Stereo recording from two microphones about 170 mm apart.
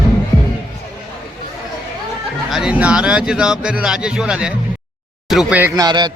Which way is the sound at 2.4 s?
5° right (ahead or behind).